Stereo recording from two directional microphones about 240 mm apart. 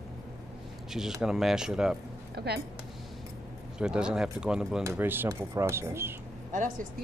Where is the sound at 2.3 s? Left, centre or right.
Right.